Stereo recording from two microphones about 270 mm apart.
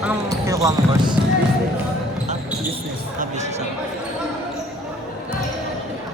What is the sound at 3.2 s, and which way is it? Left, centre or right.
Speech, right.